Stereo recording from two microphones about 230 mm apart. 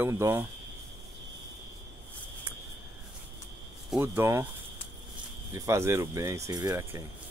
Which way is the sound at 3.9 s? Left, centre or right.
Centre.